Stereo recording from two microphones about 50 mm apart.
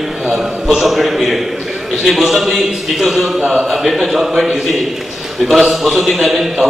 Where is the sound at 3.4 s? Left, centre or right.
Centre.